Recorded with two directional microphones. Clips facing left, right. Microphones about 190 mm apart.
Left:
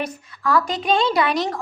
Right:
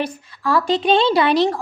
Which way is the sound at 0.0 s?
30° right (ahead or behind).